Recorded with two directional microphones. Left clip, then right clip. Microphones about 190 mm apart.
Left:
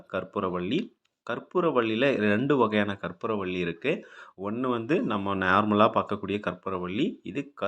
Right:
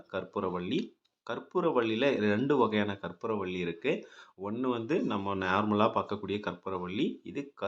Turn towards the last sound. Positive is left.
turn(degrees=15)  # may be behind; listen again after turning